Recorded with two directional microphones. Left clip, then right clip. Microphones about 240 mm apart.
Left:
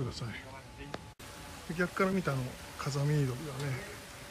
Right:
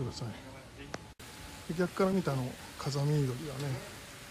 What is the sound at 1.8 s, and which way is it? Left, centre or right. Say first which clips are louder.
Speech: right 1 dB; centre.